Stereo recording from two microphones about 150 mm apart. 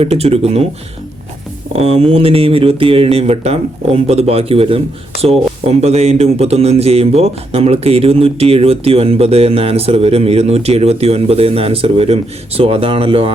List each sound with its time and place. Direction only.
0.0 s speech: 45° right (ahead or behind)
1.7 s speech: 40° right (ahead or behind)